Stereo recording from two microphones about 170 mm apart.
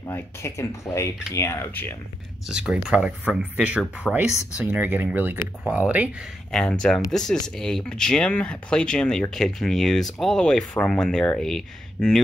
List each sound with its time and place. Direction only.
0.0 s speech: 15° left (ahead or behind)
2.4 s speech: 5° right (ahead or behind)
4.1 s speech: 5° left (ahead or behind)
4.6 s speech: 10° right (ahead or behind)
6.5 s speech: 5° left (ahead or behind)